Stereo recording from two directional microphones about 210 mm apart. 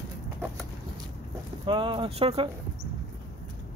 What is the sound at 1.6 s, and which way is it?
Speech, 25° right (ahead or behind).